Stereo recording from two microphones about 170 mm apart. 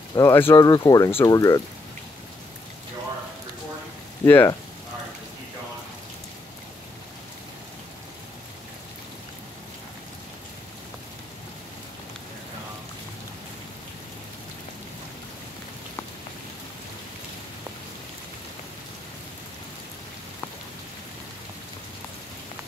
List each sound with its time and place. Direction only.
0.1 s speech: 15° left (ahead or behind)
4.2 s speech: 15° left (ahead or behind)